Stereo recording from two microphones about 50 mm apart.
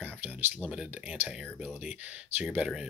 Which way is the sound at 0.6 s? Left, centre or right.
Centre.